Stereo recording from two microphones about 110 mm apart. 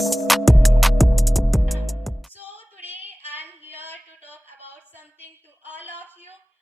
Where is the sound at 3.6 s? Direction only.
15° right (ahead or behind).